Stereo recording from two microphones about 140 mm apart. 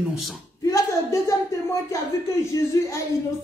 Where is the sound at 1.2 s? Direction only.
20° left (ahead or behind).